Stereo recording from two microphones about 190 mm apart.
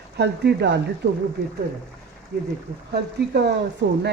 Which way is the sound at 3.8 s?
65° right (ahead or behind).